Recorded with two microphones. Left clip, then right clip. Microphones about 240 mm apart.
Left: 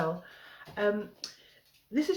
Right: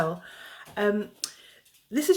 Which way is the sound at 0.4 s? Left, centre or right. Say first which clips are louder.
Right 3 dB; right.